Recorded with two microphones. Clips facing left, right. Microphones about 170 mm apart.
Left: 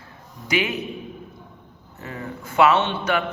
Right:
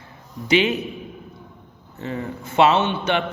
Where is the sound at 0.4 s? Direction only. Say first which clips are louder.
Right 5 dB; 25° right (ahead or behind).